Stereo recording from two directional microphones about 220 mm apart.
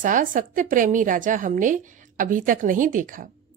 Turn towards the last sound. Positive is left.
turn(degrees=-40)  # may be behind; listen again after turning